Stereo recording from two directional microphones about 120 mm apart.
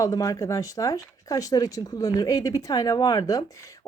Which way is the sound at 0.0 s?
30° left (ahead or behind).